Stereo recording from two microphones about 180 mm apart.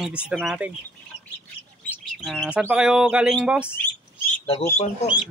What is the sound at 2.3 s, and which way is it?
Speech, 5° left (ahead or behind).